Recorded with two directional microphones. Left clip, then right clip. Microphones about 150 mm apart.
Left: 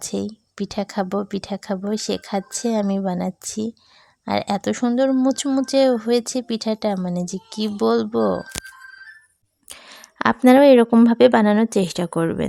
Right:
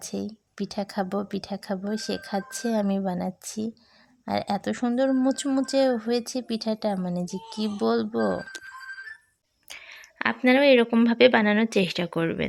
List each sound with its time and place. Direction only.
0.1 s speech: 25° left (ahead or behind)
9.6 s speech: 50° left (ahead or behind)